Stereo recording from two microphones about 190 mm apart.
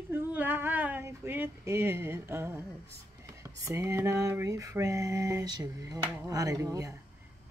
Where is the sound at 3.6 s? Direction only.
15° right (ahead or behind).